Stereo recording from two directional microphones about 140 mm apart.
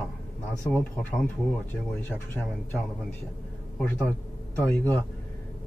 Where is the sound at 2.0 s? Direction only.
15° left (ahead or behind).